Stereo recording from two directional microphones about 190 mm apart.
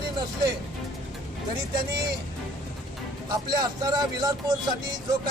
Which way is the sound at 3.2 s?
20° right (ahead or behind).